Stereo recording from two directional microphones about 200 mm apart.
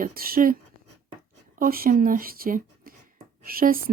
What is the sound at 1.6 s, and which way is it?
Speech, 45° right (ahead or behind).